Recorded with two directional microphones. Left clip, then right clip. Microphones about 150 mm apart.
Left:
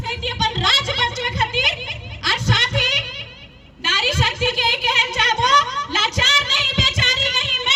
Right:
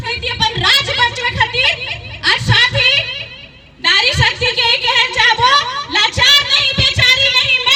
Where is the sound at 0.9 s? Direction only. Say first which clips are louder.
Right 6 dB; 25° right (ahead or behind).